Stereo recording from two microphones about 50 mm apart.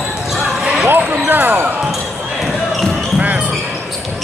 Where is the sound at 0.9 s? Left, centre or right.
Right.